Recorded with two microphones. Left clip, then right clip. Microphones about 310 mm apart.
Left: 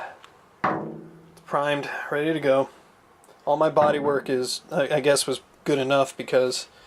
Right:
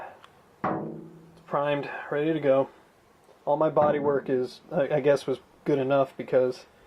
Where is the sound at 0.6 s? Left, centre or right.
Centre.